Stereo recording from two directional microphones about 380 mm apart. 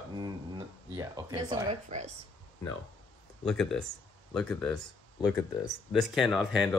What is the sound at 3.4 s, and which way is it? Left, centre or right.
Speech, centre.